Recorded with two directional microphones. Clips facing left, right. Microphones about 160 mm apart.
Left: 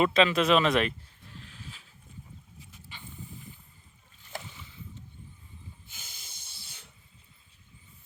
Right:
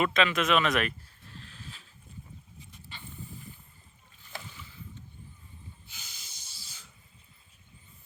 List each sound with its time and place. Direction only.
0.0 s speech: 30° left (ahead or behind)
1.3 s a sound: 15° left (ahead or behind)
2.9 s vehicle: 10° left (ahead or behind)
5.9 s hiss: 50° left (ahead or behind)